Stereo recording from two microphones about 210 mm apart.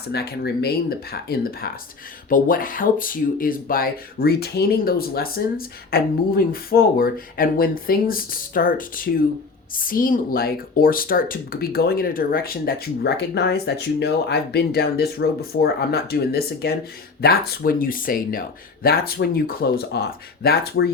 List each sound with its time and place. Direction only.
0.1 s speech: 50° left (ahead or behind)